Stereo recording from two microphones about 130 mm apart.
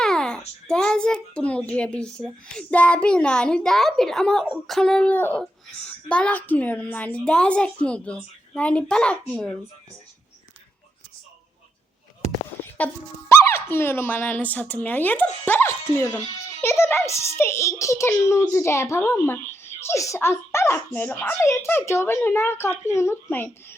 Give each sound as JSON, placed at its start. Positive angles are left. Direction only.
{"t": 0.0, "sound": "a child's voice", "side_deg": 5}
{"t": 12.7, "sound": "a child's voice", "side_deg": 10}